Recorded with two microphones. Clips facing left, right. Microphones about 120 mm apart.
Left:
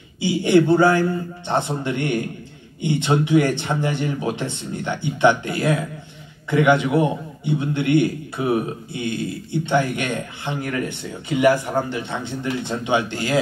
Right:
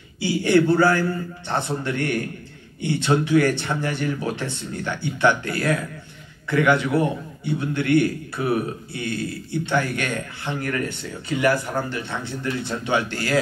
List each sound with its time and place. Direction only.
0.2 s a man's voice: 20° left (ahead or behind)